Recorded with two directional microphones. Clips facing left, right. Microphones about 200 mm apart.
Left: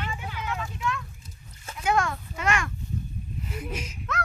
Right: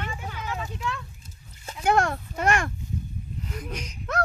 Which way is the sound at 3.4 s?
5° left (ahead or behind).